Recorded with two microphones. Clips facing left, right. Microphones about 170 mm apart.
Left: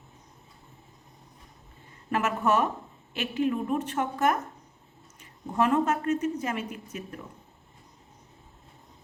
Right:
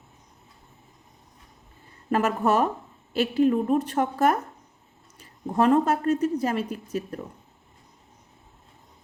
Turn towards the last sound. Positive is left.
turn(degrees=-35)  # may be behind; listen again after turning